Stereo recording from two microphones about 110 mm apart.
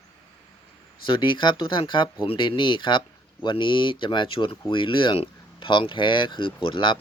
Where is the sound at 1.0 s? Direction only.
45° left (ahead or behind).